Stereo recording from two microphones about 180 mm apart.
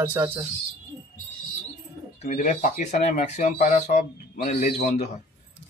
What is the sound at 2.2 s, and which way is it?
Speech, 45° left (ahead or behind).